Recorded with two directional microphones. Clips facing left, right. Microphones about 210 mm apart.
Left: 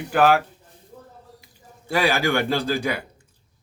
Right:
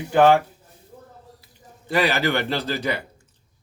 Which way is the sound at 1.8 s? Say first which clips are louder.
Even; 10° left (ahead or behind).